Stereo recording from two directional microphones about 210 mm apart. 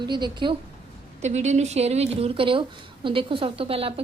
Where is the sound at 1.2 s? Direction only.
35° right (ahead or behind).